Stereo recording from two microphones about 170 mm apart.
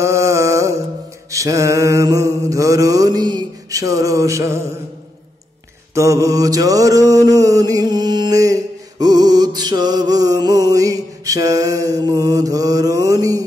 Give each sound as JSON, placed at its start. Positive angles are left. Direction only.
{"t": 0.0, "sound": "music", "side_deg": -15}
{"t": 5.9, "sound": "music", "side_deg": -20}